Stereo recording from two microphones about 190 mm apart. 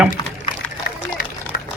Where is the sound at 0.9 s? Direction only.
55° left (ahead or behind).